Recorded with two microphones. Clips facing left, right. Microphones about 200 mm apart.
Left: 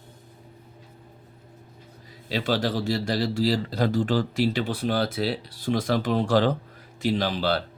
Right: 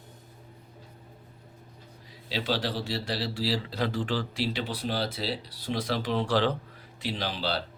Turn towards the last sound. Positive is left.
turn(degrees=50)  # may be behind; listen again after turning